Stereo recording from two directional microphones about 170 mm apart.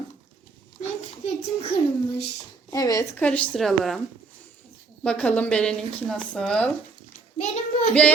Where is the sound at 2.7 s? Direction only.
20° left (ahead or behind).